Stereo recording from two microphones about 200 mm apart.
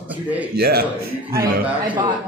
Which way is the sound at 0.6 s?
50° right (ahead or behind).